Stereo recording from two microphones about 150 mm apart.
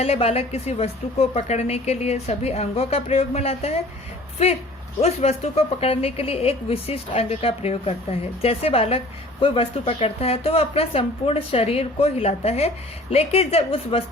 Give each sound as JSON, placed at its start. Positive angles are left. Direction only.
{"t": 0.0, "sound": "a woman's voice", "side_deg": 40}